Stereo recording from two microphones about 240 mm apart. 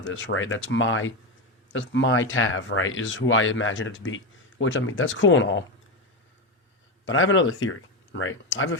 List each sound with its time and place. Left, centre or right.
0.0 s speech: left
7.0 s speech: left